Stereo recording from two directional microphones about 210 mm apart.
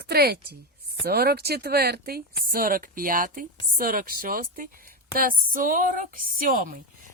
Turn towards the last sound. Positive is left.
turn(degrees=-40)  # may be behind; listen again after turning